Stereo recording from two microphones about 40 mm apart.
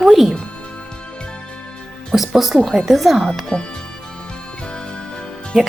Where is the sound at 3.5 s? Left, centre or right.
Left.